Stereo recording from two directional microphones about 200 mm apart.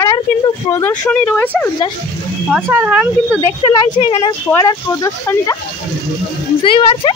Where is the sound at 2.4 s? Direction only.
10° right (ahead or behind).